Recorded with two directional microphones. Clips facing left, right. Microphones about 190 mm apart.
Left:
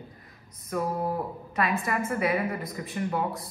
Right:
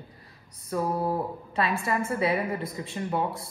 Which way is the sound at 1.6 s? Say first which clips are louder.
Even; 30° right (ahead or behind).